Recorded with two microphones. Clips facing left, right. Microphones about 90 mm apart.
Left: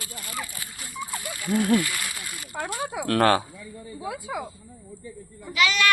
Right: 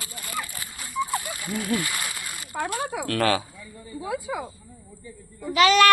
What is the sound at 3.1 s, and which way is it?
Speech, 45° left (ahead or behind).